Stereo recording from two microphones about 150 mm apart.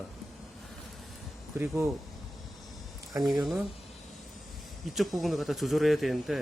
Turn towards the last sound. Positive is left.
turn(degrees=0)  # may be behind; listen again after turning